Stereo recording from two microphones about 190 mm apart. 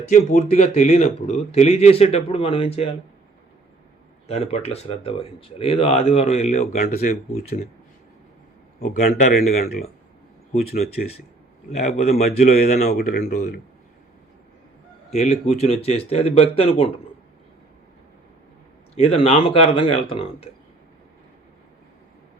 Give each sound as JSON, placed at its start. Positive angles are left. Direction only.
{"t": 0.1, "sound": "speech", "side_deg": 40}
{"t": 4.3, "sound": "speech", "side_deg": 35}
{"t": 9.2, "sound": "speech", "side_deg": 40}
{"t": 12.9, "sound": "speech", "side_deg": 55}
{"t": 15.1, "sound": "speech", "side_deg": 35}
{"t": 18.9, "sound": "speech", "side_deg": 30}